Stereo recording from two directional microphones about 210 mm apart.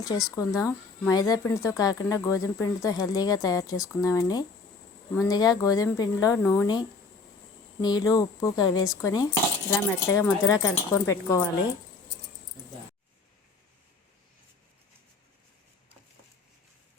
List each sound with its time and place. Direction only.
0.3 s speech: 15° left (ahead or behind)